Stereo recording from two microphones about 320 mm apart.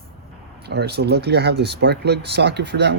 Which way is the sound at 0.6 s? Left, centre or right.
Right.